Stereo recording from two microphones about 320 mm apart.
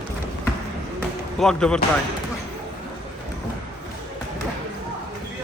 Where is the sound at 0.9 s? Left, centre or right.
Centre.